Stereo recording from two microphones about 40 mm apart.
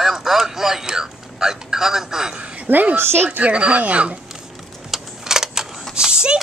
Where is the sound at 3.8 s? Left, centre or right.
Right.